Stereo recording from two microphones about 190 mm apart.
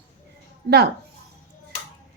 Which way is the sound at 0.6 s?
60° right (ahead or behind).